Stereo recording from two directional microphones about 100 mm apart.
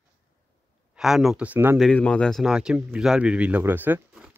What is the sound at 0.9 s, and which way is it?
Speech, 5° right (ahead or behind).